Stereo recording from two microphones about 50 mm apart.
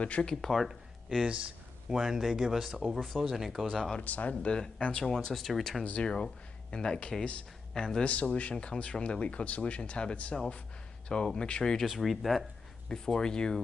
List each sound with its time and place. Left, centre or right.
0.0 s speech: left
0.5 s speech: centre
1.0 s speech: centre
4.0 s speech: left
5.0 s speech: centre
8.0 s speech: left
11.8 s speech: centre
12.8 s speech: centre